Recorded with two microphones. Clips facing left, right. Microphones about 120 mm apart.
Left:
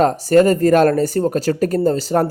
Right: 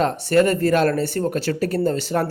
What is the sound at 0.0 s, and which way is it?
Speech, 40° left (ahead or behind).